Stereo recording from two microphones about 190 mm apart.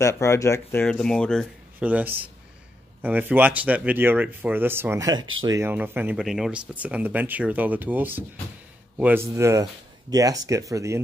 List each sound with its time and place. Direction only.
0.0 s speech: 15° left (ahead or behind)
1.8 s speech: 10° right (ahead or behind)
5.2 s speech: 90° right
5.5 s speech: 10° right (ahead or behind)